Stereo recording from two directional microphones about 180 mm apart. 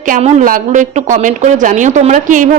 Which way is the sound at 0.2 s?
45° right (ahead or behind).